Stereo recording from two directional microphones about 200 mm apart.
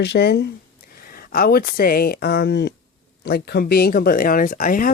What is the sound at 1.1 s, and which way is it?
Speech, 45° left (ahead or behind).